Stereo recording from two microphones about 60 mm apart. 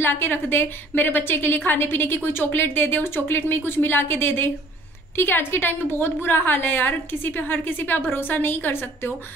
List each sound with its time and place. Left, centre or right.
0.0 s a woman's voice: left